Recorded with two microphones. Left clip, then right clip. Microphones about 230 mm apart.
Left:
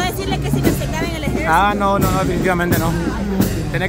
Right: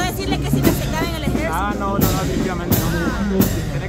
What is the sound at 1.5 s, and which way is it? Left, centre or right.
Speech, left.